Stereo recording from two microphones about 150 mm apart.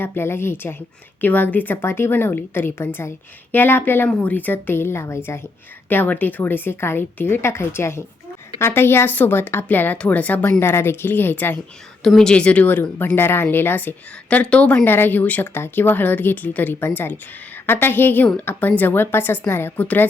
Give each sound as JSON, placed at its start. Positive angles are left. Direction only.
{"t": 0.0, "sound": "speech", "side_deg": 15}